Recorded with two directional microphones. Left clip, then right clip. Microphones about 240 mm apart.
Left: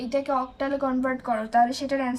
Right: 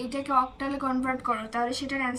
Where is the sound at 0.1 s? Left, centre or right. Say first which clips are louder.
Even; left.